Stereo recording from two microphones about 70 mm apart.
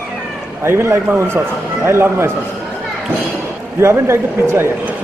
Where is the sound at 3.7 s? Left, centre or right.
Right.